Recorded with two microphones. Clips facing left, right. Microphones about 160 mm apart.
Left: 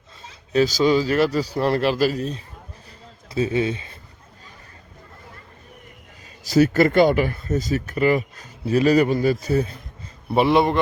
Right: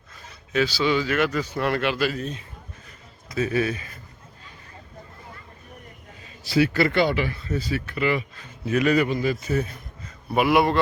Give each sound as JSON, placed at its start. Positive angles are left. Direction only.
{"t": 0.2, "sound": "a man's voice", "side_deg": 40}
{"t": 6.4, "sound": "a man's voice", "side_deg": 40}